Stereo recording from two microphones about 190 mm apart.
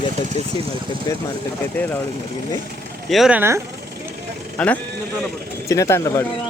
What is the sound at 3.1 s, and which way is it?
Speech, centre (ahead or behind).